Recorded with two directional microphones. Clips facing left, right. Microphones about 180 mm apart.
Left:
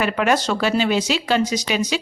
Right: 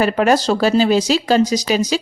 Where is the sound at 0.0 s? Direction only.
35° right (ahead or behind).